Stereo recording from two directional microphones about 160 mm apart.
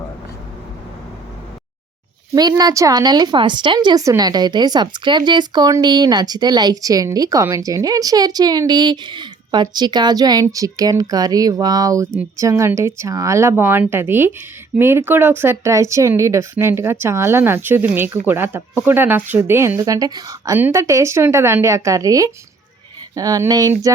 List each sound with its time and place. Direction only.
2.3 s speech: 25° right (ahead or behind)